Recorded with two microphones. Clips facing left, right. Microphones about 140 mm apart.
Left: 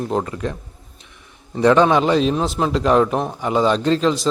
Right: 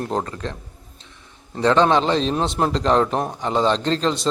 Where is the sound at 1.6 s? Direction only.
10° left (ahead or behind).